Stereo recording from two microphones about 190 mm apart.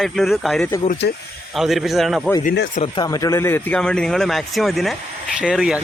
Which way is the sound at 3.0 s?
20° left (ahead or behind).